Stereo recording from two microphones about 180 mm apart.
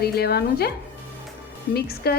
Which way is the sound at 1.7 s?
60° left (ahead or behind).